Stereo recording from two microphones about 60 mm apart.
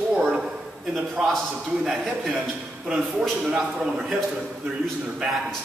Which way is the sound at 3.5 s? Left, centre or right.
Centre.